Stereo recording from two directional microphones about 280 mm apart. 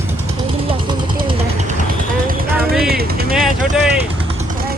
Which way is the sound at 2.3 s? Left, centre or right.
Right.